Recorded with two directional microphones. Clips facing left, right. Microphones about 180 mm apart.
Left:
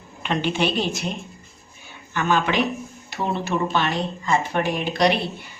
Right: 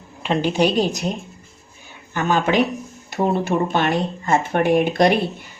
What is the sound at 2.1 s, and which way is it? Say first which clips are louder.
Speech: right 3 dB; 40° right (ahead or behind).